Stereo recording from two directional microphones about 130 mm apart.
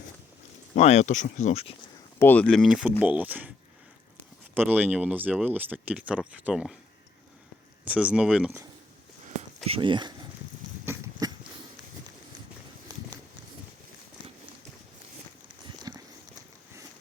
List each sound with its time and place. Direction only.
0.7 s speech: 60° left (ahead or behind)
2.1 s speech: 15° left (ahead or behind); by 3.5 s 10° right (ahead or behind)
4.7 s speech: 10° right (ahead or behind)
7.9 s speech: 10° right (ahead or behind)
9.6 s speech: 45° right (ahead or behind)
10.8 s a sound: 25° right (ahead or behind)
12.9 s walk: 30° right (ahead or behind)
15.9 s walk: 25° right (ahead or behind)